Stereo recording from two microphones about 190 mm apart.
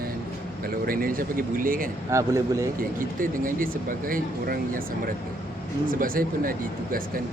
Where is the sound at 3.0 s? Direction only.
45° right (ahead or behind).